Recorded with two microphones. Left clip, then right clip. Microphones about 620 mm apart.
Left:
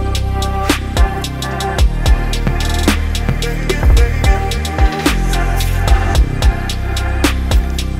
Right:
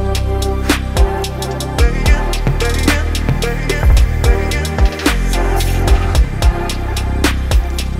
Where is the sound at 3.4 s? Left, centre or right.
Centre.